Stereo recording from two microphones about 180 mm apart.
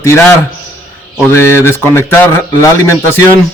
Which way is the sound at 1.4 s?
15° left (ahead or behind).